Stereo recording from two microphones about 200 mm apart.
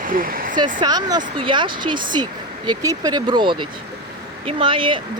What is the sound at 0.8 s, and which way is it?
Speech, 20° right (ahead or behind).